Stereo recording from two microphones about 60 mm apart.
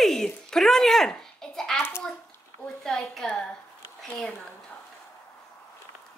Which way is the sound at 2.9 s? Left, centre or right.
Centre.